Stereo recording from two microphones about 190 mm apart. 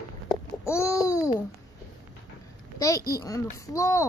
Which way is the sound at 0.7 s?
15° left (ahead or behind).